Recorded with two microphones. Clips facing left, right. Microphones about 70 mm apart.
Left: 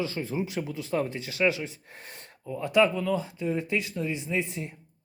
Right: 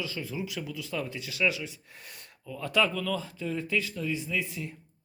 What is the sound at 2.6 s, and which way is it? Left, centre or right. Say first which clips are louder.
Speech: left 5 dB; left.